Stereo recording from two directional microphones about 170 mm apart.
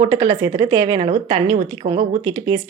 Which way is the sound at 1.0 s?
35° right (ahead or behind).